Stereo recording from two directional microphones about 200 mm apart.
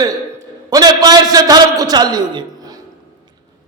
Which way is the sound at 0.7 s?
20° right (ahead or behind).